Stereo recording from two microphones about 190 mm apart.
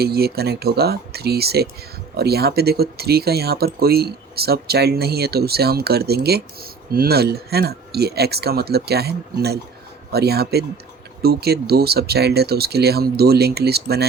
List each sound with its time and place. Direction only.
0.0 s speech: 55° right (ahead or behind)